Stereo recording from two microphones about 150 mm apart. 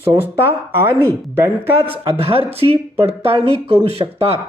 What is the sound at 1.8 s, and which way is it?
Speech, 40° right (ahead or behind).